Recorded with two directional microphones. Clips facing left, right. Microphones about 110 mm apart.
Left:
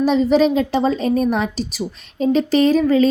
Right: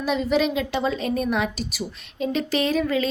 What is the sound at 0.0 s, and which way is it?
A woman's voice, 35° left (ahead or behind).